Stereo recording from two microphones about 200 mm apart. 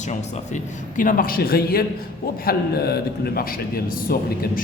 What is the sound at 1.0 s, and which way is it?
A man's voice, 45° left (ahead or behind).